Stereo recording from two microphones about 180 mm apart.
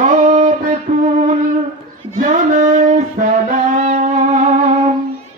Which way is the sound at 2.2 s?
45° right (ahead or behind).